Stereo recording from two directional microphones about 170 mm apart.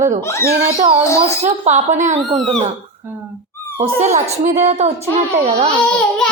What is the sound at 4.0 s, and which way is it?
Speech, 45° right (ahead or behind).